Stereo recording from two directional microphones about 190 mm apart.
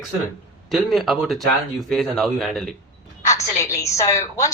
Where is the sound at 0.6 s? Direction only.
Centre (ahead or behind).